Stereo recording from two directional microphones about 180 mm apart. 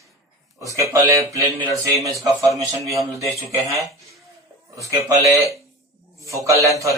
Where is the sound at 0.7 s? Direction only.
15° right (ahead or behind).